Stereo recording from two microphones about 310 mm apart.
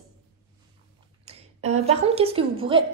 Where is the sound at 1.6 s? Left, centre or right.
Centre.